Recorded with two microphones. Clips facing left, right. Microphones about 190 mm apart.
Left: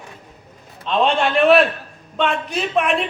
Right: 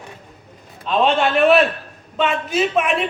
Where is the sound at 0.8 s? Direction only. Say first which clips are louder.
Right 1 dB; centre (ahead or behind).